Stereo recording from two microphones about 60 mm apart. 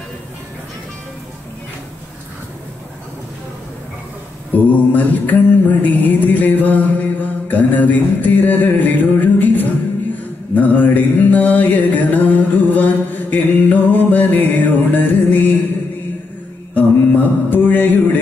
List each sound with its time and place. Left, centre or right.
4.6 s mantra: left
16.7 s mantra: left